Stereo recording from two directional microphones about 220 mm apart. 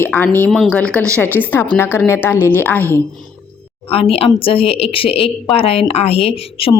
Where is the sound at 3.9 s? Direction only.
25° left (ahead or behind).